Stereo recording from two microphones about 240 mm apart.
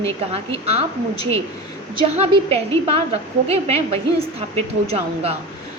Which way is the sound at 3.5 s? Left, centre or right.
Right.